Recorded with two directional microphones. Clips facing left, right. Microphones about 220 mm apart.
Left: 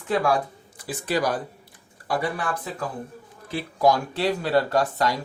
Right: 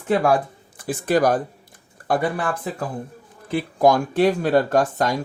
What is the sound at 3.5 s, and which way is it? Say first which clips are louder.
Speech: right 4 dB; 50° right (ahead or behind).